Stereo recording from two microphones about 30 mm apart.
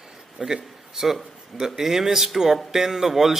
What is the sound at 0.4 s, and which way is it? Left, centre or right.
Speech, centre.